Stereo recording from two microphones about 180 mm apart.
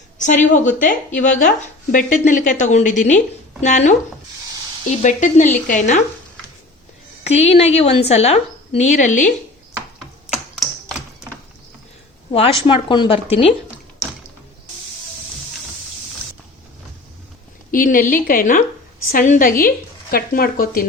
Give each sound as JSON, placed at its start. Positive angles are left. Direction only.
{"t": 0.2, "sound": "speech", "side_deg": 45}
{"t": 5.0, "sound": "speech", "side_deg": 45}
{"t": 7.3, "sound": "a woman's voice", "side_deg": 35}
{"t": 12.6, "sound": "speech", "side_deg": 25}
{"t": 17.7, "sound": "a woman's voice", "side_deg": 50}